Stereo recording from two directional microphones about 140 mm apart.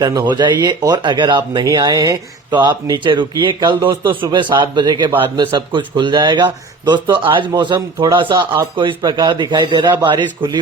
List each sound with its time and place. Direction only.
0.0 s speech: 30° right (ahead or behind)